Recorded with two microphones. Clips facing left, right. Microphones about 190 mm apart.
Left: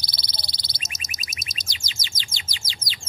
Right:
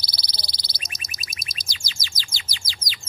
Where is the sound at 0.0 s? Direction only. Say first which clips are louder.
Even; 25° left (ahead or behind).